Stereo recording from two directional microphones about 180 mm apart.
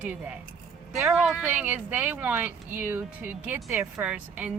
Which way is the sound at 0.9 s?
Centre (ahead or behind).